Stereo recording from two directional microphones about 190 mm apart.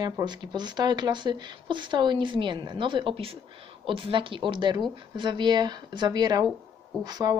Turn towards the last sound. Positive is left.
turn(degrees=-20)  # may be behind; listen again after turning